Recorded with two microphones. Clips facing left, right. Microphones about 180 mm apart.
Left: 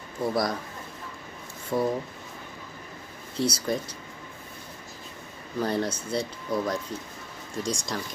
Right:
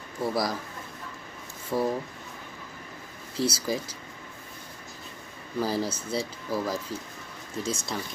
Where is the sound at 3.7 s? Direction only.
Centre (ahead or behind).